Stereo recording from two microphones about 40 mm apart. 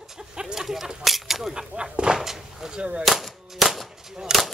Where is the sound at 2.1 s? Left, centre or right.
Centre.